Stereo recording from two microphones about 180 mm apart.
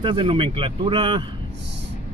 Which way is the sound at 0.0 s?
30° right (ahead or behind).